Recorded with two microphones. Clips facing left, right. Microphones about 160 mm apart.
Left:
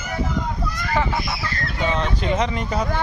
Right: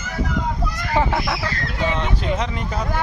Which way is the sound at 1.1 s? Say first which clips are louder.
Right 3 dB; 80° right.